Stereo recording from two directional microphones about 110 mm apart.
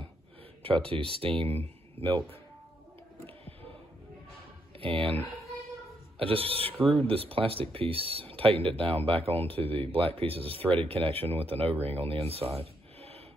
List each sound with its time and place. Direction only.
0.6 s speech: 55° right (ahead or behind)
4.7 s speech: 55° right (ahead or behind)
6.7 s speech: centre (ahead or behind)
7.1 s speech: 55° right (ahead or behind)